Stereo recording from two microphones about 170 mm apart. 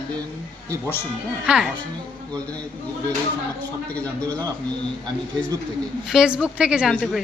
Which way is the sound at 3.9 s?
10° left (ahead or behind).